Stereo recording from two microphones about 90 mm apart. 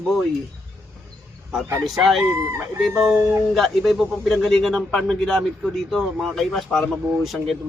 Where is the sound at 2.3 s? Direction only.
25° right (ahead or behind).